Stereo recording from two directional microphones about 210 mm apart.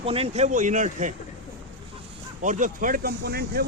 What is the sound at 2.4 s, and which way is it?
Speech, 35° right (ahead or behind).